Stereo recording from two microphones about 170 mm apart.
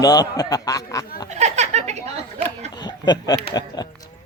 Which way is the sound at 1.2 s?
40° right (ahead or behind).